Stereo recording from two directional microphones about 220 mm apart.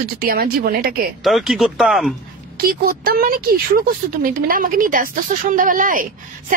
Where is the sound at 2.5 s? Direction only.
40° right (ahead or behind).